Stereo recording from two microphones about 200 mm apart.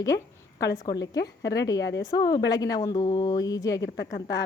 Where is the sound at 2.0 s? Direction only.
20° left (ahead or behind).